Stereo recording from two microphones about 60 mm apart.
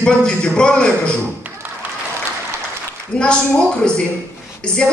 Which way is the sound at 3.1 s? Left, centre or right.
Centre.